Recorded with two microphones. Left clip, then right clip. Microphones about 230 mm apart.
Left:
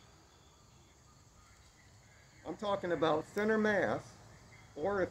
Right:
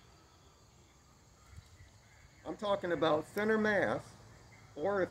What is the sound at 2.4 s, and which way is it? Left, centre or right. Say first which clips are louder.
Speech: right 1 dB; right.